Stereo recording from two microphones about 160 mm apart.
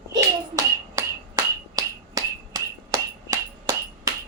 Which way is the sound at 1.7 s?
25° right (ahead or behind).